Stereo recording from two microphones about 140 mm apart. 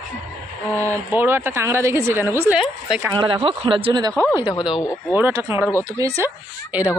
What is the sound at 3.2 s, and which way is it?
Speech, 40° right (ahead or behind).